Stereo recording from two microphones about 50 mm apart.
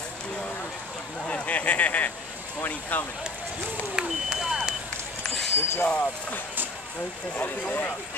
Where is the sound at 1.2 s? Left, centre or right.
Left.